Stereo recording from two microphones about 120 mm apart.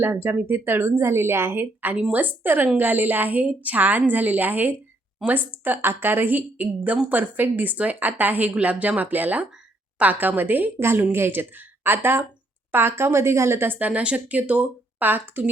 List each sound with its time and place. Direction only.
0.0 s a woman's voice: 20° right (ahead or behind)